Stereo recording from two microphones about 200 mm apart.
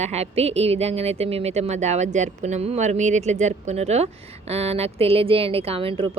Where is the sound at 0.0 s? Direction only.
30° right (ahead or behind).